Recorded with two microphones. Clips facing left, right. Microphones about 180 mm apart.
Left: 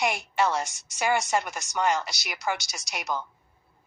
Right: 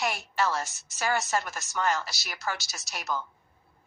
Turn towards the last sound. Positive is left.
turn(degrees=15)  # may be behind; listen again after turning